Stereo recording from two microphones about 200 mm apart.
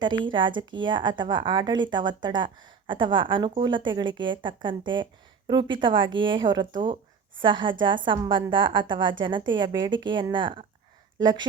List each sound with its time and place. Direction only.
0.0 s a woman's voice: 25° right (ahead or behind)